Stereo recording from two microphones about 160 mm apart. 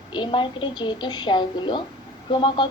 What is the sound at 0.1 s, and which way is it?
Speech, 30° left (ahead or behind).